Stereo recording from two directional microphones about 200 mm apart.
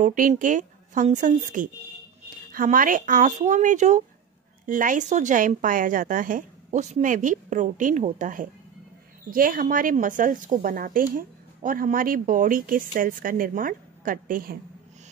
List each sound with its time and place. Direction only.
0.0 s a woman's voice: 40° right (ahead or behind)